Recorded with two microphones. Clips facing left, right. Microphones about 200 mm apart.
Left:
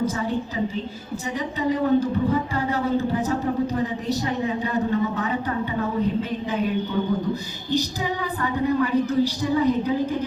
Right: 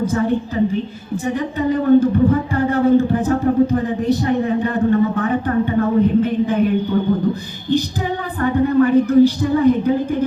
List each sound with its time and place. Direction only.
0.0 s a woman's voice: 55° right (ahead or behind)